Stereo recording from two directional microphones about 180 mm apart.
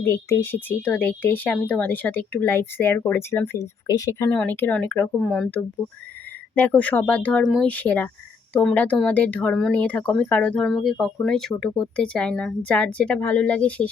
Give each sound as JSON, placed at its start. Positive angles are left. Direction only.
{"t": 0.0, "sound": "speech", "side_deg": 15}
{"t": 7.7, "sound": "speech", "side_deg": 10}